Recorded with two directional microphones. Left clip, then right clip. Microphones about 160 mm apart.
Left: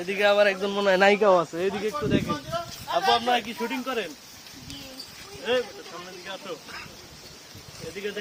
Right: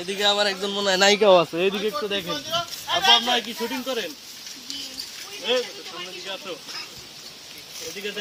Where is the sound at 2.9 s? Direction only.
35° left (ahead or behind).